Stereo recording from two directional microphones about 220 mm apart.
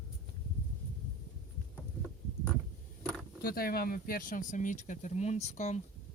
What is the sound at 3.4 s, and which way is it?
Speech, 40° left (ahead or behind).